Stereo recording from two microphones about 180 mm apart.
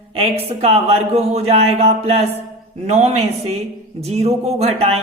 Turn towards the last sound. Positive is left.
turn(degrees=-35)  # may be behind; listen again after turning